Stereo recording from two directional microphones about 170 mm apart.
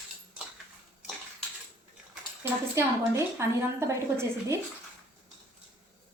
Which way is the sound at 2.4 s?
15° right (ahead or behind).